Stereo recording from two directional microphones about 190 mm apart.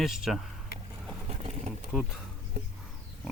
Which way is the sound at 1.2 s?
35° right (ahead or behind).